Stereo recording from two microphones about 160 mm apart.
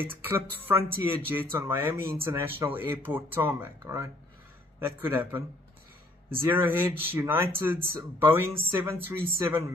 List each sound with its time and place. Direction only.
0.0 s speech: 15° right (ahead or behind)
6.3 s speech: 10° right (ahead or behind)